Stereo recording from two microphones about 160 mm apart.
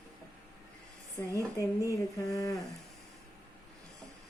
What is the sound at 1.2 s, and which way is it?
Speech, 15° left (ahead or behind).